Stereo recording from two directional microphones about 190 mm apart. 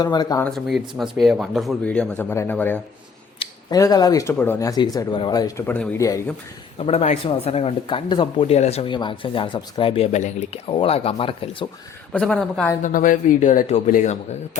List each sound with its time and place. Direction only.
0.0 s speech: 20° left (ahead or behind)
0.4 s speech: centre (ahead or behind)
3.3 s a sound: 30° left (ahead or behind)
3.8 s speech: 20° left (ahead or behind)
6.7 s speech: 30° left (ahead or behind)
12.1 s speech: 5° left (ahead or behind)
12.8 s a man's voice: 45° left (ahead or behind)